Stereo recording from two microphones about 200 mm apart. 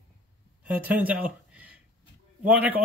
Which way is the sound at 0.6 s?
10° right (ahead or behind).